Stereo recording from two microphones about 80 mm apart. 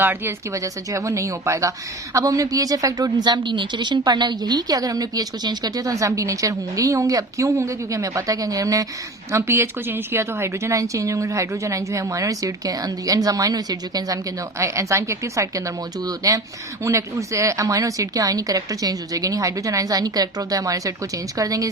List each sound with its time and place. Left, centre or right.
0.0 s speech: right
0.5 s a woman's voice: right
9.3 s a woman's voice: right
14.6 s a woman's voice: right